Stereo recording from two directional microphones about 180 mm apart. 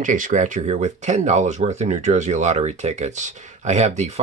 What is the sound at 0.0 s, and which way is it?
Speech, 45° right (ahead or behind).